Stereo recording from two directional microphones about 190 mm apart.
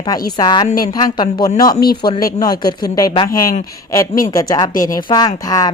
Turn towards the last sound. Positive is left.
turn(degrees=20)  # may be behind; listen again after turning